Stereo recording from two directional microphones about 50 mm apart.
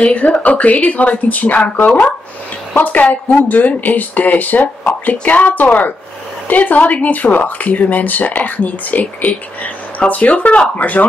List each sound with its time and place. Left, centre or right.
0.0 s speech: left